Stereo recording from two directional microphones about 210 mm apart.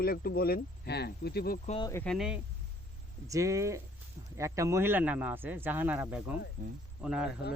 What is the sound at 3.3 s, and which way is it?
Speech, 15° right (ahead or behind).